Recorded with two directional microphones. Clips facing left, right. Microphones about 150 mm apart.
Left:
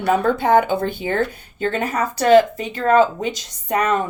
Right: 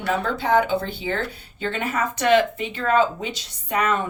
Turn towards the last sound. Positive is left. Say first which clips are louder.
# left 3 dB
turn(degrees=40)  # may be behind; listen again after turning